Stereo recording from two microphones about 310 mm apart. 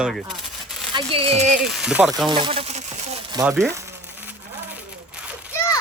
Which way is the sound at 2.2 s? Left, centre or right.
Centre.